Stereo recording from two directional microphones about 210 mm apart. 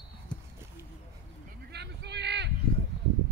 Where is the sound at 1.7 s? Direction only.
55° right (ahead or behind).